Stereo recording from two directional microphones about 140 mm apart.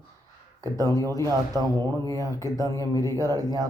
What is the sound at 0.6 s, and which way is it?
Speech, 25° right (ahead or behind).